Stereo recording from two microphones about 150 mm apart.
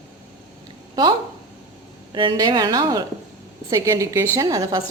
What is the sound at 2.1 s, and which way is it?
A woman's voice, 30° right (ahead or behind).